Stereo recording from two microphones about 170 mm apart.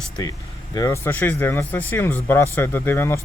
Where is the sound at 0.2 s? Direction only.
20° left (ahead or behind).